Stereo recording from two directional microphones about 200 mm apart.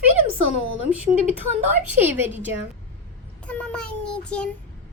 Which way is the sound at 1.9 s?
10° right (ahead or behind).